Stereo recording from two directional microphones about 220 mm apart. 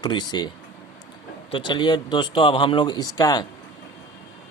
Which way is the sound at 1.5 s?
20° left (ahead or behind).